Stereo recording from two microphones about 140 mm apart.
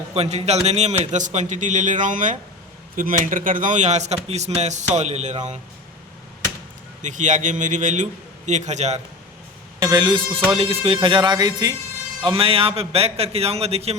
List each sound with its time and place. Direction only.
0.1 s speech: 50° right (ahead or behind)
7.0 s speech: 60° right (ahead or behind)
9.8 s a man's voice: 30° right (ahead or behind); by 13.9 s 45° right (ahead or behind)